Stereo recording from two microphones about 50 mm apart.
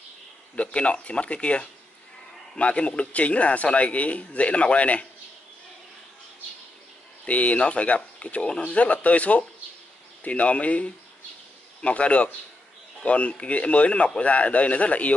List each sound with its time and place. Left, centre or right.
0.6 s speech: left
7.2 s speech: left